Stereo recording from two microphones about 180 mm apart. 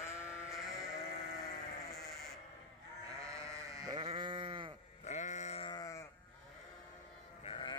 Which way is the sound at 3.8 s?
25° right (ahead or behind).